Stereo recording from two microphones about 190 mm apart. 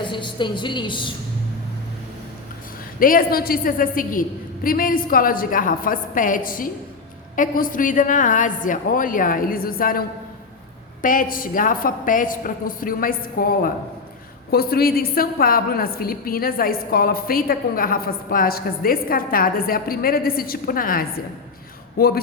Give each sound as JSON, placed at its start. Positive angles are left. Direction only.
{"t": 0.0, "sound": "a woman's voice", "side_deg": 25}
{"t": 3.0, "sound": "a woman's voice", "side_deg": 50}
{"t": 11.0, "sound": "a woman's voice", "side_deg": 45}